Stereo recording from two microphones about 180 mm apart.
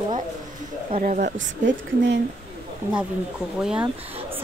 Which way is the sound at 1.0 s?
45° right (ahead or behind).